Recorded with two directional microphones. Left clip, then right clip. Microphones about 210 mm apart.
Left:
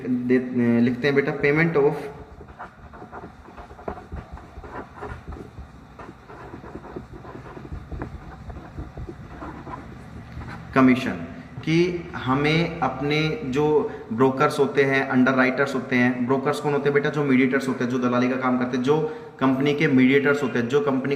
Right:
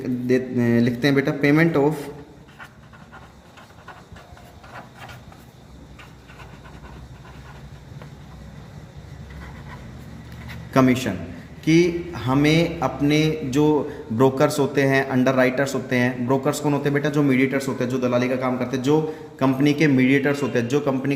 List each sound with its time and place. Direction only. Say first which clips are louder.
0.3 s speech: right 1 dB; 60° right (ahead or behind)
10.8 s a man's voice: even; 50° right (ahead or behind)